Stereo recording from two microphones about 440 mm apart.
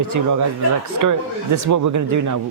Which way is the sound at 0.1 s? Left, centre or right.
Right.